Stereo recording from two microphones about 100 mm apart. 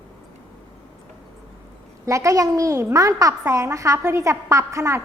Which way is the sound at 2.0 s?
30° right (ahead or behind).